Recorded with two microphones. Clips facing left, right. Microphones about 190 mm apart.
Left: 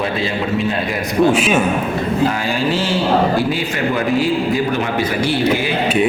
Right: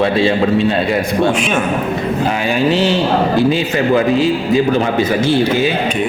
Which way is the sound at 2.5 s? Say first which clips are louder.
Right 4 dB; 20° right (ahead or behind).